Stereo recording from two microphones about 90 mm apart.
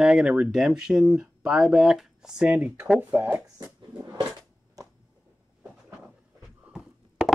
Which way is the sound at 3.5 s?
45° right (ahead or behind).